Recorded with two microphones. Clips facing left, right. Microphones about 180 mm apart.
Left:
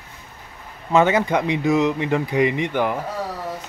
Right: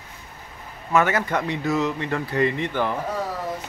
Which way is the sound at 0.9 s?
20° left (ahead or behind).